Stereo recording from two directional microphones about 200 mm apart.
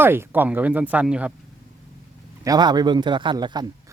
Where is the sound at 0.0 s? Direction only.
10° right (ahead or behind).